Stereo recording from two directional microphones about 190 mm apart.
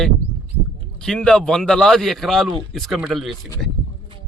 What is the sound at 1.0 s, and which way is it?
Speech, 5° left (ahead or behind).